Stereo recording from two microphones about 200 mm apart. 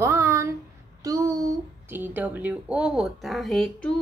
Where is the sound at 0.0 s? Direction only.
15° right (ahead or behind); by 3.9 s 5° left (ahead or behind).